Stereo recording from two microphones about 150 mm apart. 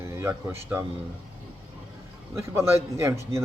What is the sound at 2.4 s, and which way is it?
Speech, 20° right (ahead or behind).